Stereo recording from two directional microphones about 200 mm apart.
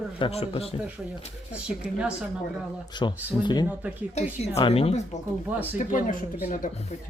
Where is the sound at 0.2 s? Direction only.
30° left (ahead or behind).